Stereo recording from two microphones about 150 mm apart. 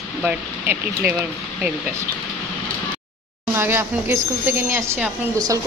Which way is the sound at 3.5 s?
15° right (ahead or behind).